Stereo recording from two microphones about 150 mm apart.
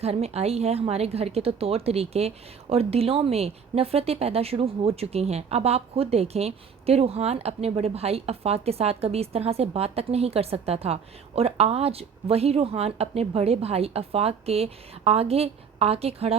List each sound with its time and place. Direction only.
0.0 s speech: 45° right (ahead or behind)